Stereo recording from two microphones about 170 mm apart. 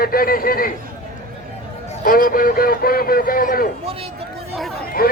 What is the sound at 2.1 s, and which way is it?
Speech, 55° left (ahead or behind).